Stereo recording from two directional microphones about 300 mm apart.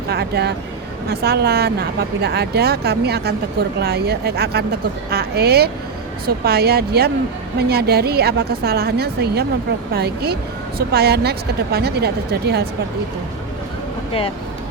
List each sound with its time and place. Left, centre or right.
0.1 s speech: right